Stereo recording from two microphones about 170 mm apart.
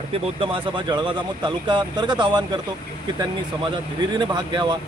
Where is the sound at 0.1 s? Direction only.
30° right (ahead or behind).